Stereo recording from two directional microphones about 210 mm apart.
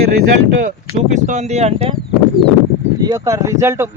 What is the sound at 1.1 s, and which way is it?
Speech, 35° right (ahead or behind).